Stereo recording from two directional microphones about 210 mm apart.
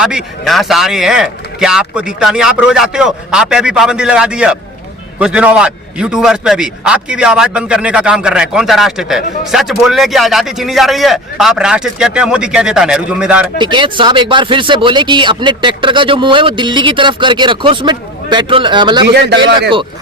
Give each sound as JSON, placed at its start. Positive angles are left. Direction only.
{"t": 0.0, "sound": "a man's voice", "side_deg": -5}
{"t": 13.6, "sound": "speech", "side_deg": -20}